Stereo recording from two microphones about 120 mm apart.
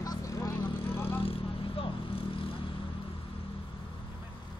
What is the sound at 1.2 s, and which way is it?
Vehicle, 50° left (ahead or behind).